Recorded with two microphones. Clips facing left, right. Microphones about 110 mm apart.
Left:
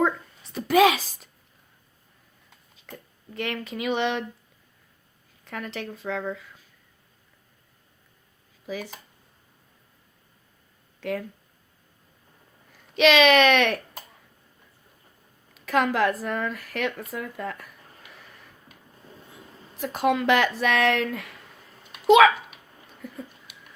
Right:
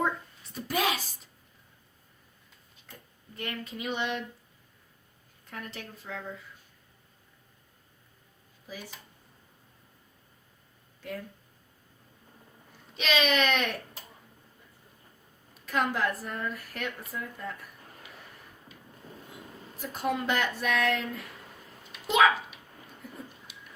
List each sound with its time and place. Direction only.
0.5 s a woman's voice: 90° left
3.3 s speech: 90° left
5.5 s speech: 90° left
8.6 s speech: 90° left
11.0 s speech: 90° left
13.0 s speech: 90° left
15.6 s speech: 90° left
19.8 s speech: 90° left
23.5 s a sound: 55° left (ahead or behind)